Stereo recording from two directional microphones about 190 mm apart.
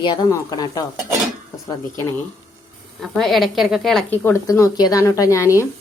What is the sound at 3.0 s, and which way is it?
A woman's voice, centre (ahead or behind).